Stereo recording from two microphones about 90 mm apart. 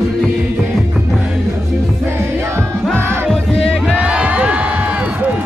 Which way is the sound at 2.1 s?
30° right (ahead or behind).